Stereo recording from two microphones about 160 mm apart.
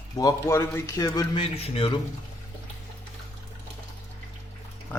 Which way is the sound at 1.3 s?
35° left (ahead or behind).